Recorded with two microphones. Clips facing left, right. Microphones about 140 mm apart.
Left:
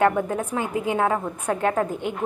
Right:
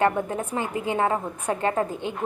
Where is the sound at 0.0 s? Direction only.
Centre (ahead or behind).